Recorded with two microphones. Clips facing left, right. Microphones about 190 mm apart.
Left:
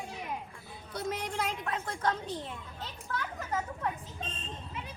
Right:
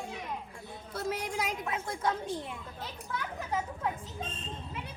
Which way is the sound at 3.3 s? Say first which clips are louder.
Right 1 dB; 10° right (ahead or behind).